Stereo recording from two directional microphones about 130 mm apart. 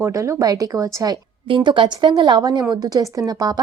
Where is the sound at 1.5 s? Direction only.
40° right (ahead or behind).